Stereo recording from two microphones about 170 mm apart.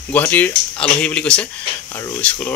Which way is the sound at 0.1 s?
10° left (ahead or behind).